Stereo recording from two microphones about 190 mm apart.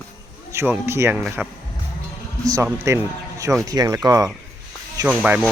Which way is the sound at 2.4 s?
20° right (ahead or behind).